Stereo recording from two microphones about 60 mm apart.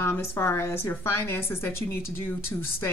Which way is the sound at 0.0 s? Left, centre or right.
Left.